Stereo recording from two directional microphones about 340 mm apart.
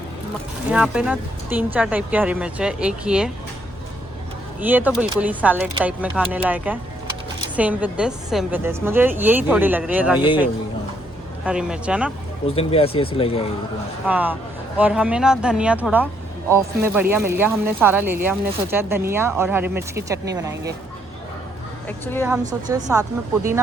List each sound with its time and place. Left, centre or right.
0.7 s speech: centre
4.6 s speech: centre
11.4 s speech: centre
12.5 s speech: centre
14.1 s speech: centre
21.8 s speech: centre
22.7 s speech: centre